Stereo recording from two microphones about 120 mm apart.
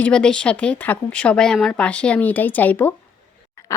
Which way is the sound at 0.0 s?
5° left (ahead or behind).